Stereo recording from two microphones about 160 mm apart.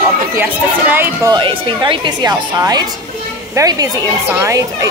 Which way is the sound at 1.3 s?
30° right (ahead or behind).